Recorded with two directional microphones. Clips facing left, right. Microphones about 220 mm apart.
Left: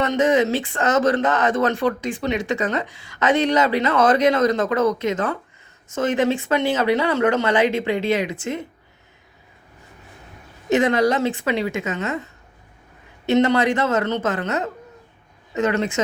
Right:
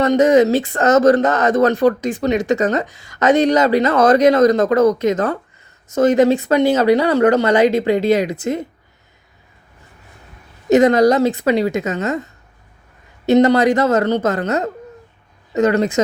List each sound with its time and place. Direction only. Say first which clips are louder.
0.0 s speech: right 6 dB; 40° right (ahead or behind)
10.7 s speech: right 6 dB; 40° right (ahead or behind)
13.2 s speech: right 5 dB; 40° right (ahead or behind)